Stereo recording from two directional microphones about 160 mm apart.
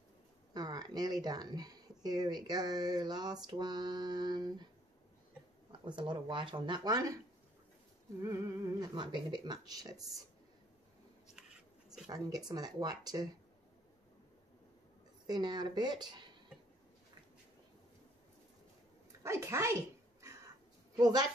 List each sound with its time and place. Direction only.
0.5 s speech: 25° right (ahead or behind)
5.7 s speech: 30° right (ahead or behind)
8.2 s speech: 15° right (ahead or behind)
12.1 s speech: 25° right (ahead or behind)
15.2 s speech: 25° right (ahead or behind)
19.2 s a sound: 15° right (ahead or behind)
20.9 s speech: 25° right (ahead or behind)